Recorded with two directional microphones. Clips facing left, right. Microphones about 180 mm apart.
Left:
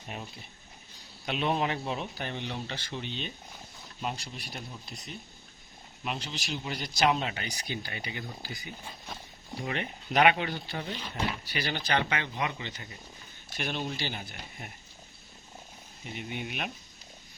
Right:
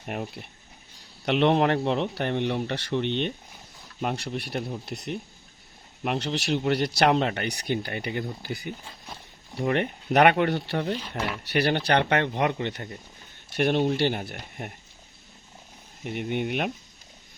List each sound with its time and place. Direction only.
0.0 s speech: 60° right (ahead or behind)
16.0 s speech: 60° right (ahead or behind)